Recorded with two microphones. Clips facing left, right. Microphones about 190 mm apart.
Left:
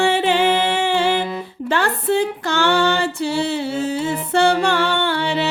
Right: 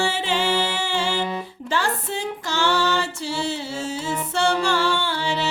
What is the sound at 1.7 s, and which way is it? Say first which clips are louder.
Female singing: left 7 dB; 60° left (ahead or behind).